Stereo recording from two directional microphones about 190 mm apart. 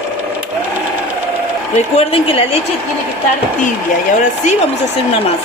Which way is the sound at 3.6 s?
40° left (ahead or behind).